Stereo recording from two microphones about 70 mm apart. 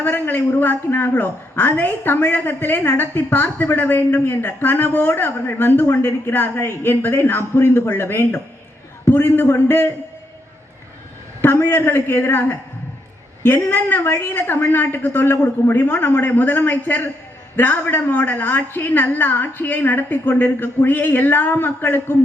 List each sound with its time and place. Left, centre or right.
0.0 s a woman's voice: left
11.4 s a woman's voice: left